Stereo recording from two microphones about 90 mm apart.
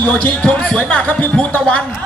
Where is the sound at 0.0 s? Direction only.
20° left (ahead or behind).